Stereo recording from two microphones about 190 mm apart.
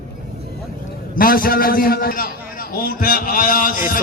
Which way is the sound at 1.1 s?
50° left (ahead or behind).